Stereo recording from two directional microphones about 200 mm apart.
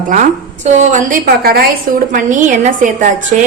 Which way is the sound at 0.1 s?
40° right (ahead or behind).